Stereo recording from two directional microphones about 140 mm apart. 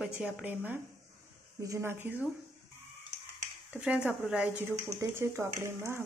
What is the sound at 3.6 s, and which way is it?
A woman's voice, 10° right (ahead or behind).